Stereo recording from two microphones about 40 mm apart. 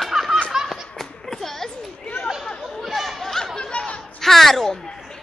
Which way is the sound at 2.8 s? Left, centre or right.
Centre.